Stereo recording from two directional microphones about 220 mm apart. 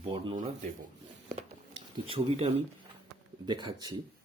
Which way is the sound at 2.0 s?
25° right (ahead or behind).